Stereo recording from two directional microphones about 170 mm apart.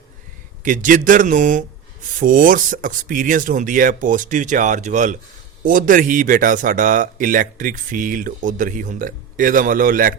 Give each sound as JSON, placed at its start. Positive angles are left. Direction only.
{"t": 0.6, "sound": "a man's voice", "side_deg": -50}